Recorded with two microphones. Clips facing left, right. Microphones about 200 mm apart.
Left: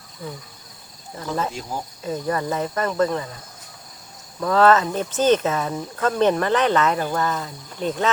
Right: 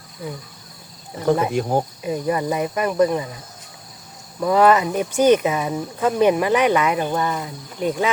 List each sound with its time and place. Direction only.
1.5 s cricket: 60° right (ahead or behind)
2.0 s speech: 15° right (ahead or behind)
4.4 s speech: 15° right (ahead or behind)